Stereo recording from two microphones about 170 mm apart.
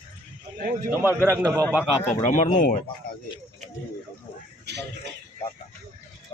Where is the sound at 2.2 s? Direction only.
45° left (ahead or behind).